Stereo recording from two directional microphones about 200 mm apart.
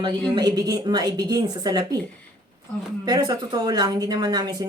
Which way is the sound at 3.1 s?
20° right (ahead or behind).